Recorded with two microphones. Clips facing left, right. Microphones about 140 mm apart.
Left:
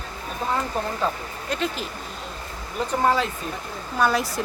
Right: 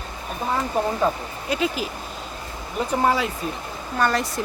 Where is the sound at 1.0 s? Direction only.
10° right (ahead or behind).